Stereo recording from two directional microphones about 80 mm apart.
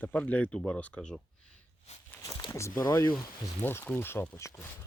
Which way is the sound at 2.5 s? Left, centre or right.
Left.